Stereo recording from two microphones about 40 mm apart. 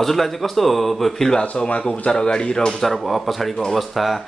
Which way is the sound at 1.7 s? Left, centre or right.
Left.